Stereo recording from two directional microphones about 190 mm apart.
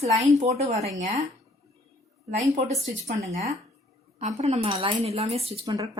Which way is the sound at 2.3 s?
40° right (ahead or behind).